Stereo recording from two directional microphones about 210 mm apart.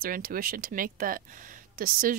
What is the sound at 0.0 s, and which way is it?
A woman's voice, 45° right (ahead or behind).